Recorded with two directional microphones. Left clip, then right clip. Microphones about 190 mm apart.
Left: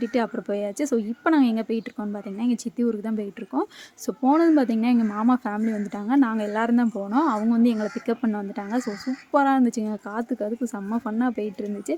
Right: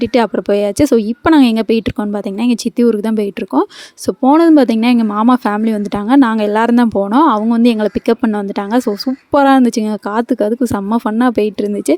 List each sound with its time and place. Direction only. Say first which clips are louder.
0.0 s speech: right 12 dB; 50° right (ahead or behind)